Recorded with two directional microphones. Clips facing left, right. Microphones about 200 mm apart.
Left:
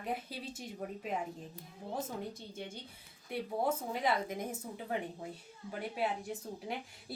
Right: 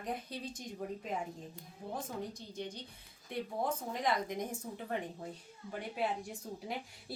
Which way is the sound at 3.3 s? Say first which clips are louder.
Left 2 dB; 5° left (ahead or behind).